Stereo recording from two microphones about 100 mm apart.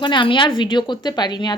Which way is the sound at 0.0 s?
55° left (ahead or behind).